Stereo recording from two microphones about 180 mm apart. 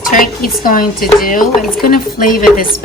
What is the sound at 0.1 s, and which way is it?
Stir, 50° left (ahead or behind).